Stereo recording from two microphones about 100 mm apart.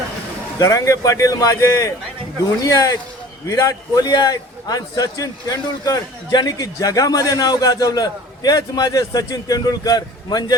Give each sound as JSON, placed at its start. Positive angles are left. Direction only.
{"t": 0.6, "sound": "a man's voice", "side_deg": 35}